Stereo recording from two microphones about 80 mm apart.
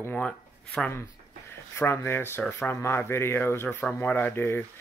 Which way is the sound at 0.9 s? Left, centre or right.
Left.